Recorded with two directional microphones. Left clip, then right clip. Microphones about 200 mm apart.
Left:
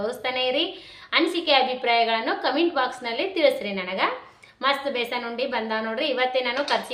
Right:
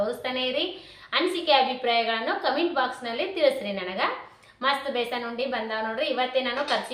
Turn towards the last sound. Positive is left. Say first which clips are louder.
# left 2 dB
turn(degrees=55)  # may be behind; listen again after turning